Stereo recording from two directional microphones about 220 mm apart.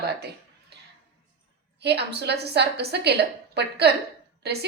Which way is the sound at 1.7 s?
50° right (ahead or behind).